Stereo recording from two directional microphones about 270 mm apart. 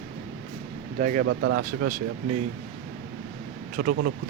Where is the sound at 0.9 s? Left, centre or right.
Right.